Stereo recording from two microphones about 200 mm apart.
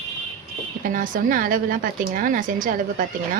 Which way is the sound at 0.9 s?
40° right (ahead or behind).